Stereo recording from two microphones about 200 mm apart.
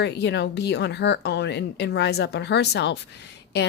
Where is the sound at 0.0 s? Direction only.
60° left (ahead or behind).